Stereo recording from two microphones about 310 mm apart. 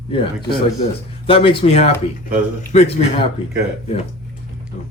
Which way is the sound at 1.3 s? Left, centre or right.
Centre.